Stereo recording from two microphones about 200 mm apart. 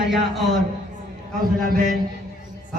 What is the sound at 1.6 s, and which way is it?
Speech, 45° right (ahead or behind).